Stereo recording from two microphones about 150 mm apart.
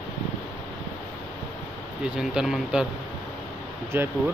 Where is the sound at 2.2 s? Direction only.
5° right (ahead or behind).